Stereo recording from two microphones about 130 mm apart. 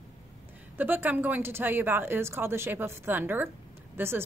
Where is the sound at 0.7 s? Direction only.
15° right (ahead or behind).